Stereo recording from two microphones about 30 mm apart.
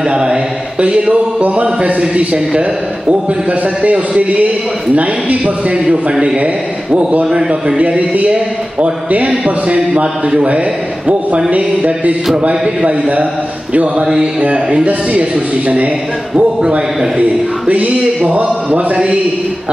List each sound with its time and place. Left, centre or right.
0.1 s a man's voice: right
1.5 s speech: right
2.0 s a man's voice: right
4.2 s speech: right
5.7 s speech: right
7.3 s a man's voice: right
7.8 s speech: right
9.9 s speech: right
11.5 s music: right
14.4 s a man's voice: right
15.6 s speech: right
16.3 s a man's voice: right
17.2 s speech: right
18.3 s music: right